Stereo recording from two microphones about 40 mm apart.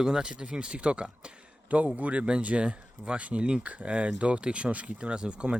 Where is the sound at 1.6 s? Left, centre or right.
Right.